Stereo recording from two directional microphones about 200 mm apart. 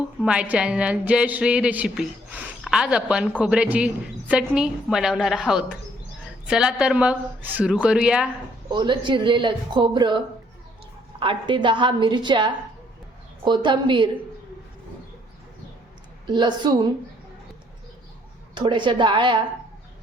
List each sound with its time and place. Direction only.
0.2 s a woman's voice: 5° right (ahead or behind)
8.7 s speech: 20° right (ahead or behind)
11.2 s speech: 25° right (ahead or behind)
16.2 s speech: 20° right (ahead or behind)
18.5 s speech: 25° right (ahead or behind)